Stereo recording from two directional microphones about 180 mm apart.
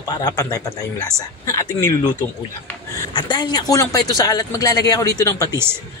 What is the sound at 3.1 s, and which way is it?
A man's voice, 25° left (ahead or behind).